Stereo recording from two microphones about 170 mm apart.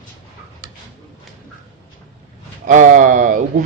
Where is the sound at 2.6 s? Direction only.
50° right (ahead or behind).